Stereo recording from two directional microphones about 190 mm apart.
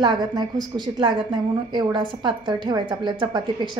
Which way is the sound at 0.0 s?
20° right (ahead or behind).